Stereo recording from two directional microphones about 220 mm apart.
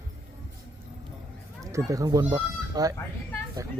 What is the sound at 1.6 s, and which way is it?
Speech, 15° right (ahead or behind).